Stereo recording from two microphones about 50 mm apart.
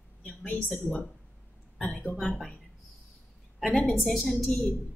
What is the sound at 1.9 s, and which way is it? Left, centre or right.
Speech, left.